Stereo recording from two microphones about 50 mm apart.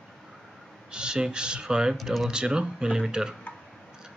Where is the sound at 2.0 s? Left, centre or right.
Centre.